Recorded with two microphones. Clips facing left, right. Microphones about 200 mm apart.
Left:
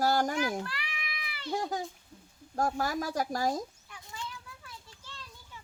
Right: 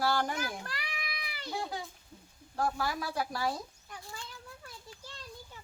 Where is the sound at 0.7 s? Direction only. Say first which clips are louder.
Even; 40° right (ahead or behind).